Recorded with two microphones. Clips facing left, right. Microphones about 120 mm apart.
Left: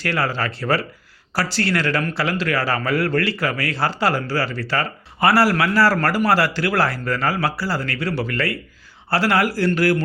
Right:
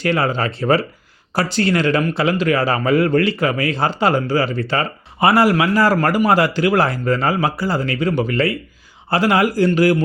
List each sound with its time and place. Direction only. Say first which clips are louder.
0.0 s a man's voice: right 4 dB; 20° right (ahead or behind)